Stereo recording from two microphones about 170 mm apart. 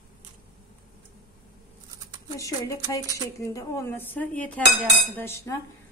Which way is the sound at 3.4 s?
15° left (ahead or behind).